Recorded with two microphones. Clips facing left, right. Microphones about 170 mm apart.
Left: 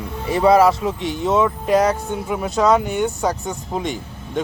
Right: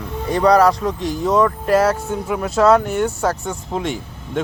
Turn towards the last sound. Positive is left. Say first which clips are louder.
# right 1 dB
turn(degrees=0)  # may be behind; listen again after turning